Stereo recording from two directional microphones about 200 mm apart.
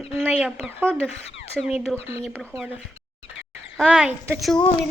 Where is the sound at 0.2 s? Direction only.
10° right (ahead or behind).